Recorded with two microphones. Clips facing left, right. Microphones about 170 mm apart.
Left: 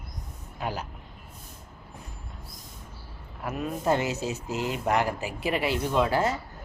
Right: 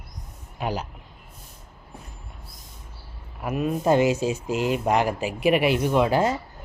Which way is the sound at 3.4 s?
15° right (ahead or behind).